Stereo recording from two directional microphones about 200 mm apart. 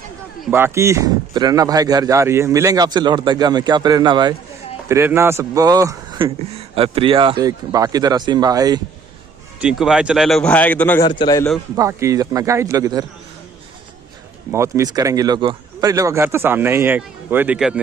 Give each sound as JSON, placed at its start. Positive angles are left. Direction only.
{"t": 0.5, "sound": "speech", "side_deg": -10}
{"t": 9.6, "sound": "speech", "side_deg": -5}
{"t": 11.1, "sound": "a man's voice", "side_deg": 20}
{"t": 11.7, "sound": "speech", "side_deg": -15}
{"t": 14.5, "sound": "speech", "side_deg": -15}